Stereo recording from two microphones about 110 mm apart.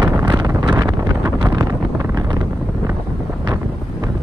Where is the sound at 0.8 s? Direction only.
40° right (ahead or behind).